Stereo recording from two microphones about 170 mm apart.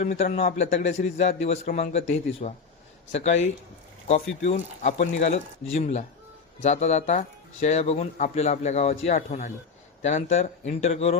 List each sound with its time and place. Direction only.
0.0 s speech: 45° left (ahead or behind)